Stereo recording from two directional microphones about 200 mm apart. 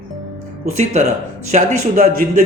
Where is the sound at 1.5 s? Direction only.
40° right (ahead or behind).